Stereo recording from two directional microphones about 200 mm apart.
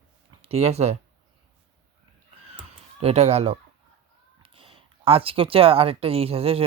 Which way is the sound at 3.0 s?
30° right (ahead or behind).